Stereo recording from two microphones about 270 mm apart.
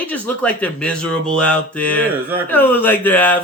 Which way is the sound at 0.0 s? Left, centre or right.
Centre.